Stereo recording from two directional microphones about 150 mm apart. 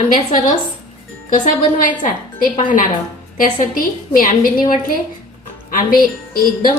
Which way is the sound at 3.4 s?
65° left (ahead or behind).